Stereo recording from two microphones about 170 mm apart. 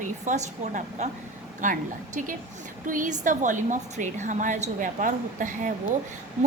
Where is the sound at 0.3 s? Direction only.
45° right (ahead or behind).